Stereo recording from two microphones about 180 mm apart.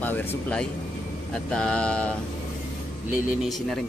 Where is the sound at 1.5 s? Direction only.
5° left (ahead or behind).